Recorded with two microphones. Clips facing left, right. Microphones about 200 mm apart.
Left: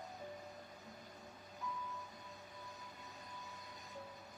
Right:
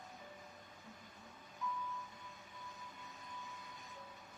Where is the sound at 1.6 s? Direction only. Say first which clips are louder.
Right 3 dB; 35° left (ahead or behind).